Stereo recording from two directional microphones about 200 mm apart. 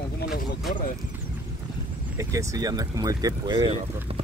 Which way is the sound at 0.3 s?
Centre (ahead or behind).